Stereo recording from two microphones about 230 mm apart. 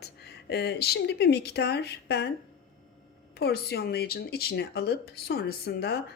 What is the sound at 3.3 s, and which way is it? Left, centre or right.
Speech, left.